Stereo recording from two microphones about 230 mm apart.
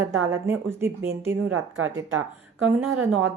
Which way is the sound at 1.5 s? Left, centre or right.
Right.